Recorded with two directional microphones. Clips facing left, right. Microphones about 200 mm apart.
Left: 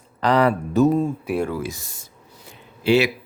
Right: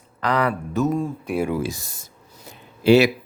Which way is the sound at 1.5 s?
30° right (ahead or behind).